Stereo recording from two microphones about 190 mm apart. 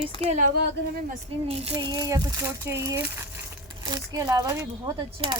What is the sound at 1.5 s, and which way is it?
Speech, 30° right (ahead or behind).